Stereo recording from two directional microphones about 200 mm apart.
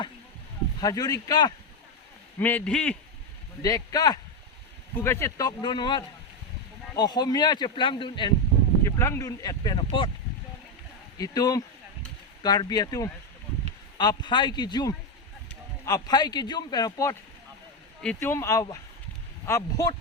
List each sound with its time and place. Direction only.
0.8 s speech: 20° left (ahead or behind)
2.4 s speech: 10° left (ahead or behind)
3.6 s speech: 20° left (ahead or behind)
8.8 s speech: 15° left (ahead or behind)
11.2 s speech: 20° left (ahead or behind)